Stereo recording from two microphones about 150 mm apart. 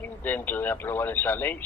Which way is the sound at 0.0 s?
10° left (ahead or behind).